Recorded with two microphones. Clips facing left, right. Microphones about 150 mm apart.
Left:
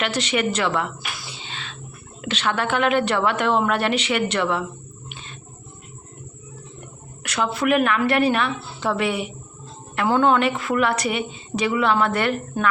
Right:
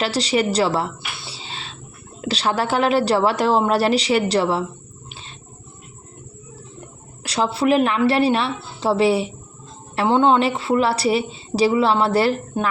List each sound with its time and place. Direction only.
0.0 s a woman's voice: 35° right (ahead or behind)
1.3 s a sound: 35° right (ahead or behind)
2.2 s a woman's voice: 35° right (ahead or behind)
7.2 s a woman's voice: 30° right (ahead or behind)